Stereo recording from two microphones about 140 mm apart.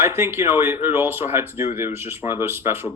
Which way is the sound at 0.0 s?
20° right (ahead or behind).